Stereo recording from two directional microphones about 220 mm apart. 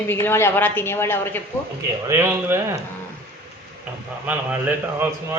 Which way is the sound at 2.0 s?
10° right (ahead or behind).